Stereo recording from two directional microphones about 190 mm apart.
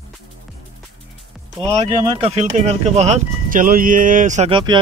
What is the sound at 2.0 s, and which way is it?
Speech, 25° right (ahead or behind).